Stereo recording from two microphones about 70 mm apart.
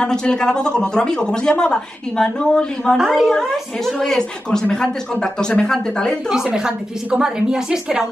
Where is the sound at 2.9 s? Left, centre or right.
Centre.